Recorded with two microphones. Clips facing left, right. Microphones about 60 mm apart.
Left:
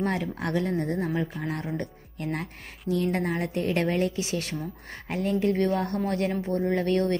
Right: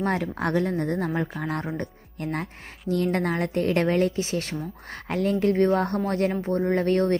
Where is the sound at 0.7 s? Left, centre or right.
Right.